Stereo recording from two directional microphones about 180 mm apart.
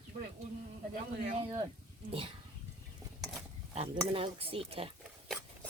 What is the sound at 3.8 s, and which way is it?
Speech, 30° right (ahead or behind).